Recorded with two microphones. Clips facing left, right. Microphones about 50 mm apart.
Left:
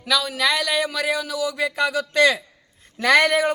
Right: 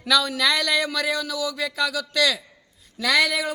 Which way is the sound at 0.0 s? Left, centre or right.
Centre.